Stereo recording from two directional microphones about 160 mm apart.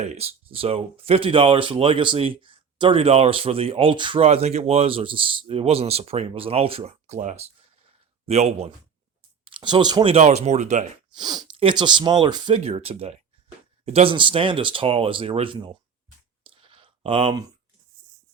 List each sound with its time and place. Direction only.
0.0 s speech: 40° right (ahead or behind)
11.1 s speech: 25° right (ahead or behind)
16.4 s clicking: 35° right (ahead or behind)